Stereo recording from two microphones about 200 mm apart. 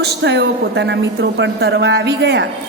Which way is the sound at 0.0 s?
60° right (ahead or behind).